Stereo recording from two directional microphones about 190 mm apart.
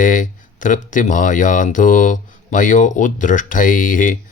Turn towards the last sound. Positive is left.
turn(degrees=45)  # may be behind; listen again after turning